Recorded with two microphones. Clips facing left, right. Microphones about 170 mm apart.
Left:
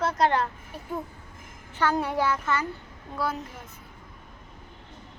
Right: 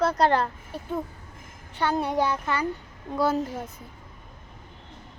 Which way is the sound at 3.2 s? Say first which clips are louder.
Right 6 dB; 30° right (ahead or behind).